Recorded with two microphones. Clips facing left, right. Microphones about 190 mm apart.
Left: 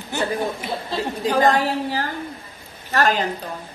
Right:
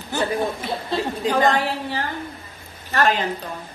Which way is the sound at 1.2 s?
40° left (ahead or behind).